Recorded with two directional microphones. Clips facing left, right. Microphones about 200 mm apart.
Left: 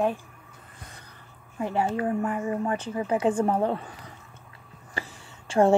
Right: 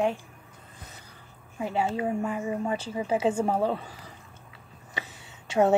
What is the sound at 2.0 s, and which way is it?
Speech, 15° right (ahead or behind).